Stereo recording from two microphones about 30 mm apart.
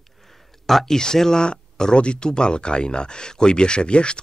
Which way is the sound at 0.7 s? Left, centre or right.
Centre.